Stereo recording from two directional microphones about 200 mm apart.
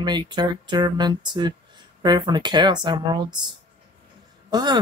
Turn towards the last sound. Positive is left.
turn(degrees=-20)  # may be behind; listen again after turning